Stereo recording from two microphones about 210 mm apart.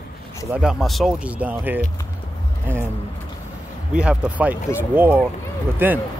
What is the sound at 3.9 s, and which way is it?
Speech, 5° right (ahead or behind).